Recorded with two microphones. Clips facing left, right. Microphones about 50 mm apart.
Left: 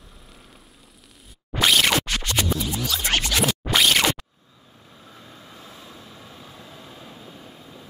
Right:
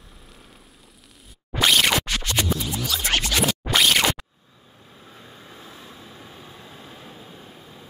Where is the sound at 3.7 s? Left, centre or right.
Centre.